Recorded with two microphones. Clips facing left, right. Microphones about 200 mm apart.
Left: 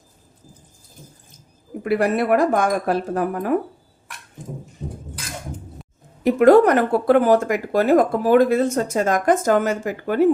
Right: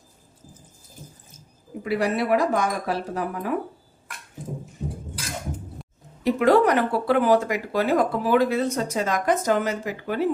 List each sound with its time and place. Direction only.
1.8 s speech: 55° left (ahead or behind)
6.2 s speech: 50° left (ahead or behind)